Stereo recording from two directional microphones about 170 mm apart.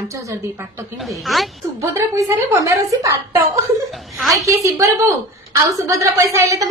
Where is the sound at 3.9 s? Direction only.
Centre (ahead or behind).